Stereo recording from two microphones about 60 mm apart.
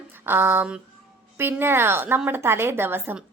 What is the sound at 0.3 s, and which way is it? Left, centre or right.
A woman's voice, right.